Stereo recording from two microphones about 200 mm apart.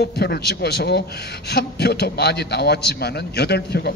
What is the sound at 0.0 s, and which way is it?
A man's voice, 55° left (ahead or behind).